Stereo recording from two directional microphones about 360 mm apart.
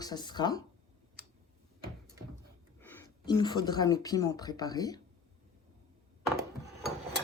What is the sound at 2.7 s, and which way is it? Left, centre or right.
Speech, centre.